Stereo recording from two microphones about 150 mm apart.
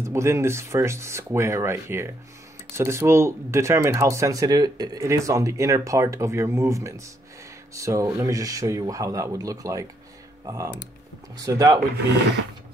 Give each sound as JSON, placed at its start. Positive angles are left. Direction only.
{"t": 0.0, "sound": "speech", "side_deg": -20}